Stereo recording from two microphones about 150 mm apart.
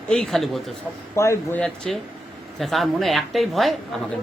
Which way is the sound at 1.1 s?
20° left (ahead or behind).